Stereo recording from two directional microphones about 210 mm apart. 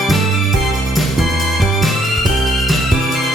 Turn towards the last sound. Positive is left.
turn(degrees=0)  # may be behind; listen again after turning